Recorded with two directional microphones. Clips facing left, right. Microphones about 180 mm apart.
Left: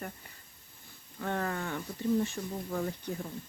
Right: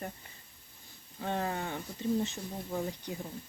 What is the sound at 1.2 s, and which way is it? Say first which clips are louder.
Speech: even; 20° right (ahead or behind).